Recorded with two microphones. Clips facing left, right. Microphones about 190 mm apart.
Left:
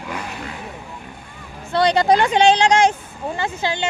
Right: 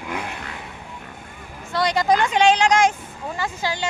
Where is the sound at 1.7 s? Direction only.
30° left (ahead or behind).